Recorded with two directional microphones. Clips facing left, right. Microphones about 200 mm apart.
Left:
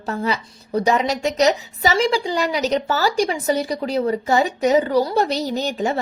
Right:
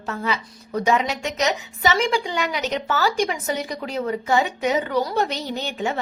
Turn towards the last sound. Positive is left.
turn(degrees=40)  # may be behind; listen again after turning